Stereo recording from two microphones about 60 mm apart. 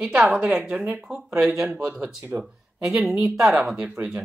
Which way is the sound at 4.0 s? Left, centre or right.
Right.